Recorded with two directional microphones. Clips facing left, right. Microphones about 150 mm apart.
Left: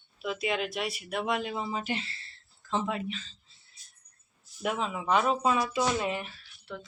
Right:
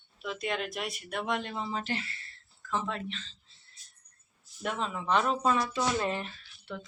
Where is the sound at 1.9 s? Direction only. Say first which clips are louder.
Left 1 dB; 30° left (ahead or behind).